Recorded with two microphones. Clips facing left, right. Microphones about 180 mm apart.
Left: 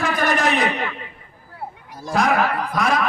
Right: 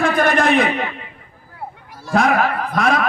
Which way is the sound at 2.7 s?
50° right (ahead or behind).